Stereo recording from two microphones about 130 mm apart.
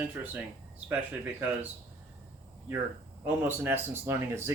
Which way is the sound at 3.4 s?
20° right (ahead or behind).